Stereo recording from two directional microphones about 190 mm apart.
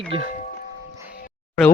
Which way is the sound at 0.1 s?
30° right (ahead or behind).